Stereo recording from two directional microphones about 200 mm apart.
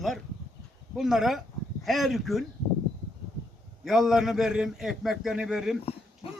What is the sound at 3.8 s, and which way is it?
A man's voice, centre (ahead or behind).